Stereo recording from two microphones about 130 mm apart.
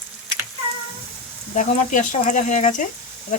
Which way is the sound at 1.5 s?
80° left.